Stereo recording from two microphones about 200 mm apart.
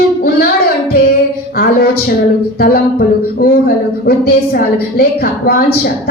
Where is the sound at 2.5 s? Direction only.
50° left (ahead or behind).